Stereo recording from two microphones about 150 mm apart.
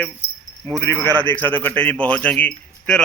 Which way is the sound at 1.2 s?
10° left (ahead or behind).